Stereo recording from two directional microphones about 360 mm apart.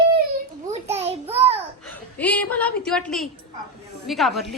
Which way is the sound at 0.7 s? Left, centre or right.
Centre.